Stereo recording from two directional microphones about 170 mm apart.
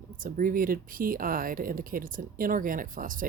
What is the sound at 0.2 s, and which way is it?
Speech, 55° right (ahead or behind).